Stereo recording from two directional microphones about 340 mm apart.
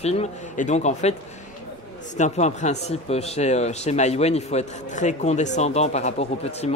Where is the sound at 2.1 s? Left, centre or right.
Centre.